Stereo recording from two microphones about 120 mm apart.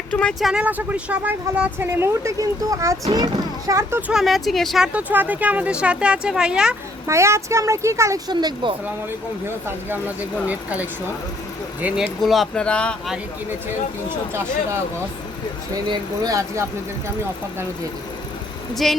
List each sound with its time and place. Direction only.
0.1 s speech: 10° left (ahead or behind)
0.6 s speech: 15° right (ahead or behind)
4.1 s speech: centre (ahead or behind)
4.9 s speech: 15° right (ahead or behind)
7.1 s speech: 20° right (ahead or behind)
8.3 s speech: 35° right (ahead or behind)
9.6 s speech: 15° right (ahead or behind)
12.2 s speech: centre (ahead or behind)
15.7 s speech: 30° right (ahead or behind)
18.7 s speech: centre (ahead or behind)